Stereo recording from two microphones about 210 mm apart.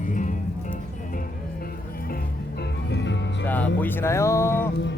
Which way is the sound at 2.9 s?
60° left (ahead or behind).